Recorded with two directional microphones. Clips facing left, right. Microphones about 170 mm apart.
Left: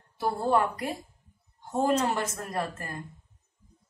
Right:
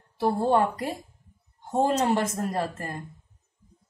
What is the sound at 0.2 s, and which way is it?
Speech, 30° right (ahead or behind).